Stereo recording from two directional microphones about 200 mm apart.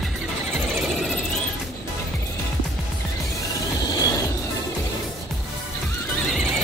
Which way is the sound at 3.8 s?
20° left (ahead or behind).